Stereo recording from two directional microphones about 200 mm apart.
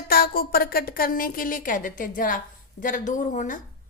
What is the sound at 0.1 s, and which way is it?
A woman's voice, 50° left (ahead or behind).